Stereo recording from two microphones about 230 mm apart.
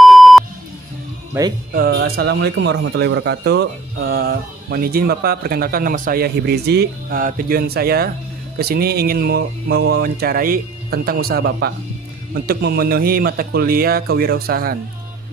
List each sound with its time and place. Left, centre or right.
0.0 s beep: centre
1.3 s speech: centre
1.7 s a man's voice: right